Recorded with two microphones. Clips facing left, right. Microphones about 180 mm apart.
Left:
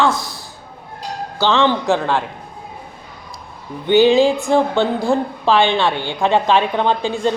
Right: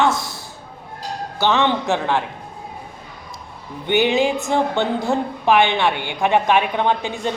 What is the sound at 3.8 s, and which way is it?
A woman's voice, 20° right (ahead or behind).